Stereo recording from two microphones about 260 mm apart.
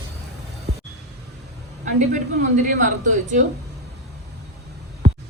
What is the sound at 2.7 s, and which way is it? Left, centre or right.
Speech, right.